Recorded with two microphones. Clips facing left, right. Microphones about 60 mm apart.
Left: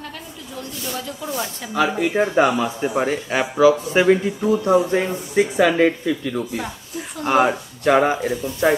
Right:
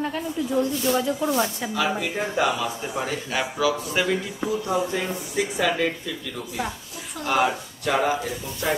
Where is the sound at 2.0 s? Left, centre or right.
Left.